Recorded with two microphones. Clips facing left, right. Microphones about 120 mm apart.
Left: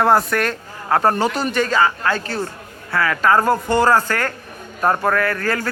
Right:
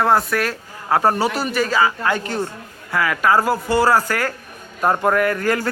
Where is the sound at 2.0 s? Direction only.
15° right (ahead or behind).